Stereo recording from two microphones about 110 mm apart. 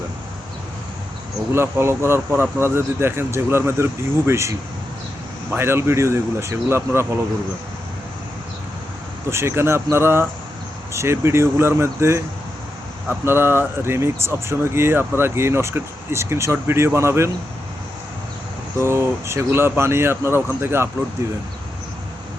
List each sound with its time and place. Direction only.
1.5 s speech: 25° right (ahead or behind)
9.3 s speech: 25° right (ahead or behind)
13.2 s speech: 20° right (ahead or behind)
18.9 s speech: 25° right (ahead or behind)